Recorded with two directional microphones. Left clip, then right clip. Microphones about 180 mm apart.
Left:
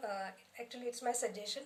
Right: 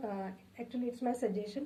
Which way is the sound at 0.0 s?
20° left (ahead or behind).